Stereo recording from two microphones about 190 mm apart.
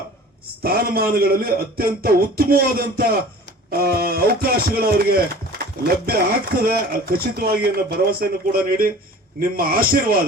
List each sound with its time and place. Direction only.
0.6 s speech: 55° right (ahead or behind)